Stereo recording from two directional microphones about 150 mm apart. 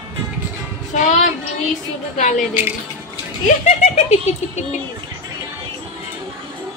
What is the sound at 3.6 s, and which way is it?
Speech, 50° left (ahead or behind).